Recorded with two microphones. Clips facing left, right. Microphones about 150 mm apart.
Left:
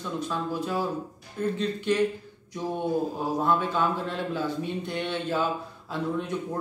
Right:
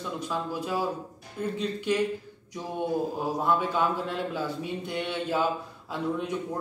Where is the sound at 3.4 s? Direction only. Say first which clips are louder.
Left 1 dB; 10° right (ahead or behind).